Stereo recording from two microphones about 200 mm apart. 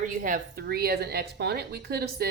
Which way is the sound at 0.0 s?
40° right (ahead or behind).